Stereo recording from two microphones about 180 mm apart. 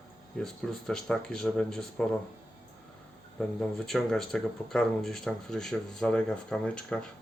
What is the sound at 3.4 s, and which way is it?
Speech, 5° left (ahead or behind).